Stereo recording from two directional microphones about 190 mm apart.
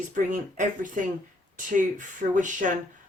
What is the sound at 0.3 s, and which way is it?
Speech, 45° right (ahead or behind).